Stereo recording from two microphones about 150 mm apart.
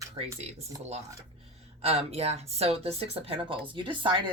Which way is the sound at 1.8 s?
45° right (ahead or behind).